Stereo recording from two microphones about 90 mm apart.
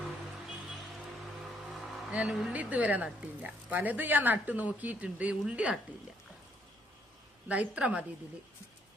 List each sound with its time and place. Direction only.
1.7 s music: centre (ahead or behind)
2.1 s speech: 10° right (ahead or behind)
7.4 s speech: 15° right (ahead or behind)